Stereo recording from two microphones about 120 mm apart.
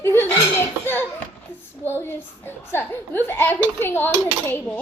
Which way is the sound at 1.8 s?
20° left (ahead or behind).